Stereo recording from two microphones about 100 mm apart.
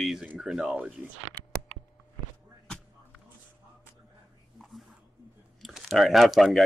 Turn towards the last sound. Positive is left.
turn(degrees=0)  # may be behind; listen again after turning